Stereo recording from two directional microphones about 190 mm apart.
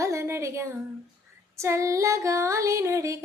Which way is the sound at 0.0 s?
15° right (ahead or behind).